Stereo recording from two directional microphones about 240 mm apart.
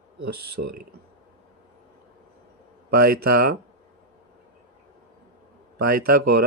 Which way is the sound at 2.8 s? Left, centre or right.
Right.